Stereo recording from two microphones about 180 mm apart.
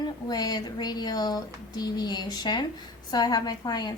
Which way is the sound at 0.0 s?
20° left (ahead or behind).